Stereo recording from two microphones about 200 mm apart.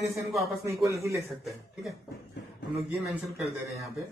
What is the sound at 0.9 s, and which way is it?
Speech, 15° right (ahead or behind).